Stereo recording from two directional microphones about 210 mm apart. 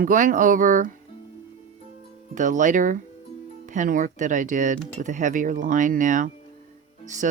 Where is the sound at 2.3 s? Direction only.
35° right (ahead or behind).